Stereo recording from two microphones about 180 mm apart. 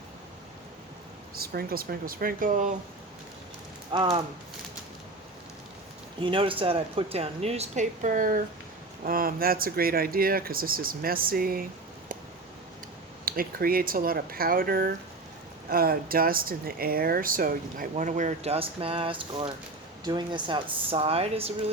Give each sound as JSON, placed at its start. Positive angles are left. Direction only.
{"t": 1.4, "sound": "speech", "side_deg": -55}
{"t": 3.9, "sound": "speech", "side_deg": -25}
{"t": 6.2, "sound": "speech", "side_deg": -30}
{"t": 13.2, "sound": "speech", "side_deg": -55}